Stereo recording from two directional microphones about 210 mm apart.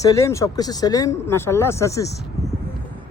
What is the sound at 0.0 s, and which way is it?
Speech, 15° left (ahead or behind).